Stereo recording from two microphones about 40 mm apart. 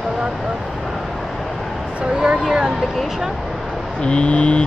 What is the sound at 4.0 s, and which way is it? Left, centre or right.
Speech, left.